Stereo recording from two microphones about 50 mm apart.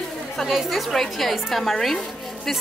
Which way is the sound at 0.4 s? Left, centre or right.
Centre.